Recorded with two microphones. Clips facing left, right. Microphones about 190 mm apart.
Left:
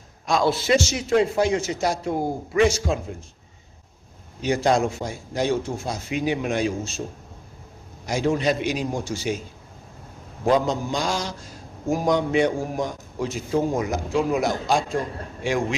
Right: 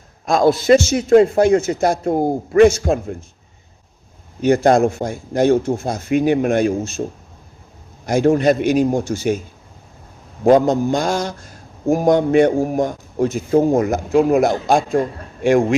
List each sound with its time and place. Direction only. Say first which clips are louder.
0.3 s a man's voice: right 8 dB; 50° right (ahead or behind)
4.4 s a man's voice: right 7 dB; 55° right (ahead or behind)
8.0 s a man's voice: right 8 dB; 55° right (ahead or behind)
10.4 s a man's voice: right 8 dB; 50° right (ahead or behind)